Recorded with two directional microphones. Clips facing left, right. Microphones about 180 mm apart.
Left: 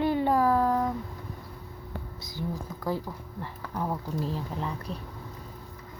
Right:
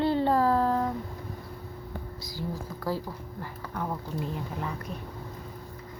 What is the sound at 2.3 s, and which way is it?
Speech, 20° left (ahead or behind).